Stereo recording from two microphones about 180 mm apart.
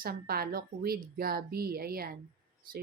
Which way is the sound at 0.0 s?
55° right (ahead or behind).